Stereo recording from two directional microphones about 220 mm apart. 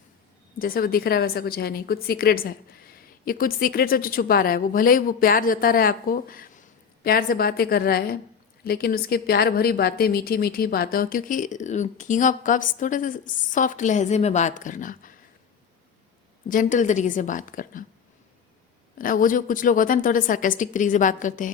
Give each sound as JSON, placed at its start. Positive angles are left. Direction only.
{"t": 0.6, "sound": "a woman's voice", "side_deg": 40}
{"t": 16.5, "sound": "a woman's voice", "side_deg": 35}
{"t": 18.9, "sound": "a woman's voice", "side_deg": 40}